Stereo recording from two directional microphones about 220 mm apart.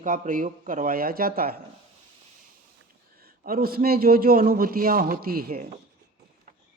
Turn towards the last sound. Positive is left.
turn(degrees=-40)  # may be behind; listen again after turning